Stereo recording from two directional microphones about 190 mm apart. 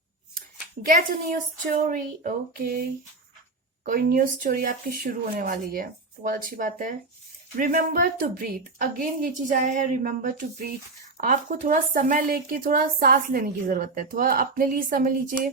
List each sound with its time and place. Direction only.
0.9 s a woman's voice: 45° right (ahead or behind)
3.8 s a woman's voice: 50° right (ahead or behind)